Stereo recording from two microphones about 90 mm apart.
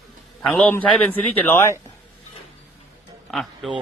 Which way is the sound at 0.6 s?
20° left (ahead or behind).